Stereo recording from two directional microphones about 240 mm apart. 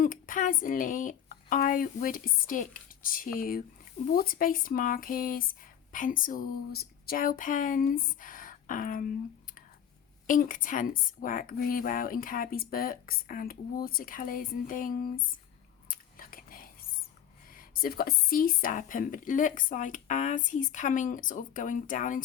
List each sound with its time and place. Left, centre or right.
0.0 s speech: left
10.2 s speech: left
15.9 s whispering: left
17.5 s speech: left